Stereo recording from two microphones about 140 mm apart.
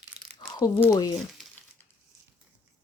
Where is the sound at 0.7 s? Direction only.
15° left (ahead or behind).